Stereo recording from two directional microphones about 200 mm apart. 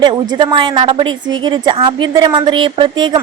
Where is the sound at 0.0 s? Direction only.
25° right (ahead or behind).